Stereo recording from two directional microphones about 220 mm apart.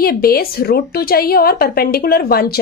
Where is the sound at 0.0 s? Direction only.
45° left (ahead or behind).